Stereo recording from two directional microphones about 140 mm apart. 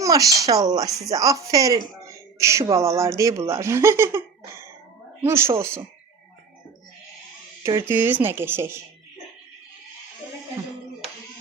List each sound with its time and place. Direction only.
0.0 s speech: 25° right (ahead or behind)
7.9 s speech: 15° right (ahead or behind)